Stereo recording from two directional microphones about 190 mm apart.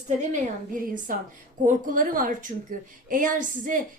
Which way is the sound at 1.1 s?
45° right (ahead or behind).